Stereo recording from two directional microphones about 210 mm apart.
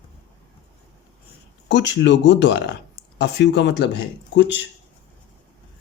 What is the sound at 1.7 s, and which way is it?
Speech, 55° left (ahead or behind).